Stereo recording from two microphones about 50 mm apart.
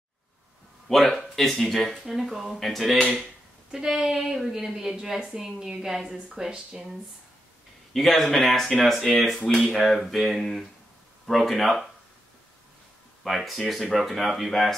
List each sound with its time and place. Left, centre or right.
0.8 s a woman's voice: centre
7.9 s speech: centre
13.2 s speech: centre